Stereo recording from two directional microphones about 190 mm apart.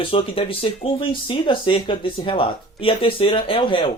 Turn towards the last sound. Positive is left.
turn(degrees=25)  # may be behind; listen again after turning